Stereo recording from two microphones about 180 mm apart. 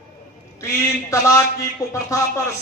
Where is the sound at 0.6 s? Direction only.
15° left (ahead or behind).